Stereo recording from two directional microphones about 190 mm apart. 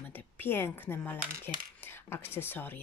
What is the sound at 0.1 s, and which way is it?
Speech, 10° left (ahead or behind).